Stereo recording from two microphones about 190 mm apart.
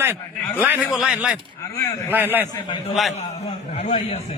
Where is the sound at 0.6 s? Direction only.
5° right (ahead or behind).